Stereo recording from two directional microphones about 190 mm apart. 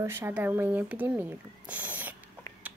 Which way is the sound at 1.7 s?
10° right (ahead or behind).